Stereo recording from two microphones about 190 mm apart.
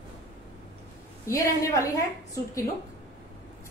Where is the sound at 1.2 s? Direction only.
15° left (ahead or behind).